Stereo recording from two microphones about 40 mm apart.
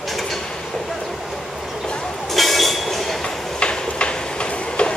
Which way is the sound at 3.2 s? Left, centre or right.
Left.